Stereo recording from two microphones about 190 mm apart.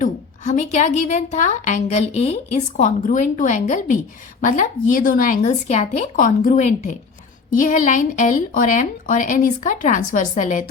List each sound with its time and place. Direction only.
0.0 s a woman's voice: 40° left (ahead or behind)